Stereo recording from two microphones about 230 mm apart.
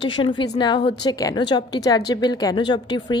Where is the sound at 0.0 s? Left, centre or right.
Left.